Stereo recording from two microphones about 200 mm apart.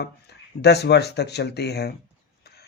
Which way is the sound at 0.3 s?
55° left (ahead or behind).